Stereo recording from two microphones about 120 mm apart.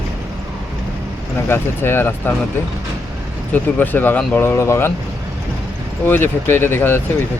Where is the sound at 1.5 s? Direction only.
20° left (ahead or behind).